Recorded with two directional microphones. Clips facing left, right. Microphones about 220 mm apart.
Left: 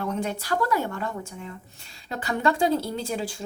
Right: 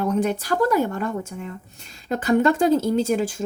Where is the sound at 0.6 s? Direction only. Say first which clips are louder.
Right 8 dB; 40° right (ahead or behind).